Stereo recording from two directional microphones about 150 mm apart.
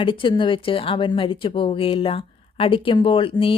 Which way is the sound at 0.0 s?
35° left (ahead or behind).